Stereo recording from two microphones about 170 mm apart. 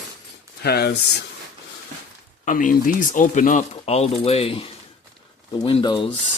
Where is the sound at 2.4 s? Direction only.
50° left (ahead or behind); by 6.1 s 30° left (ahead or behind).